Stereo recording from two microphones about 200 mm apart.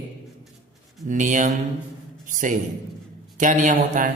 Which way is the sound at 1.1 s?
40° right (ahead or behind).